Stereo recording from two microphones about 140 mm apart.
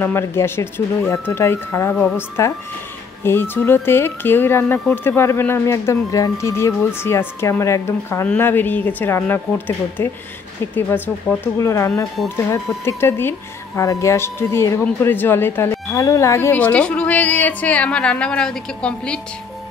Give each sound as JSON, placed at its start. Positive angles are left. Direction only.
{"t": 0.0, "sound": "a woman's voice", "side_deg": 15}
{"t": 4.7, "sound": "speech", "side_deg": 5}
{"t": 5.0, "sound": "a woman's voice", "side_deg": 15}